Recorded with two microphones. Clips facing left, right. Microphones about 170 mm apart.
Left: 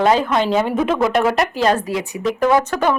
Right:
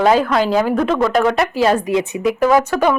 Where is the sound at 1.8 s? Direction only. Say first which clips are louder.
Right 5 dB; 20° right (ahead or behind).